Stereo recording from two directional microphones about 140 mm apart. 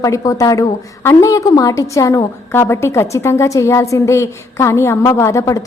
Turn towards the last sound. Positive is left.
turn(degrees=20)  # may be behind; listen again after turning